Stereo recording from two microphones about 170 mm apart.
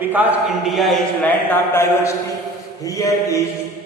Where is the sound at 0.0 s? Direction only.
10° right (ahead or behind).